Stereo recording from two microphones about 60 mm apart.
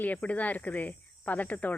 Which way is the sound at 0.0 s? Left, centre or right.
Left.